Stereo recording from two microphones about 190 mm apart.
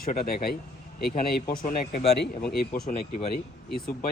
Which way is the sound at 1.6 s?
35° left (ahead or behind).